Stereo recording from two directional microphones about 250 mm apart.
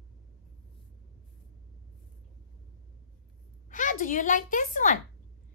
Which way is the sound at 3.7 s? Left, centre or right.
Left.